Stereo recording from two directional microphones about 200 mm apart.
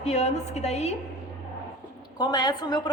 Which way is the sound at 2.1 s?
20° left (ahead or behind).